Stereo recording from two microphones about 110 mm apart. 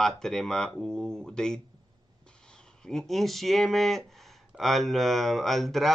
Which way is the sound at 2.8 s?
5° left (ahead or behind).